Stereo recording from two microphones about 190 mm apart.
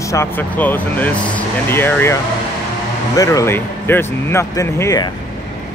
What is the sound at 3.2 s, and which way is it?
Speech, 15° left (ahead or behind).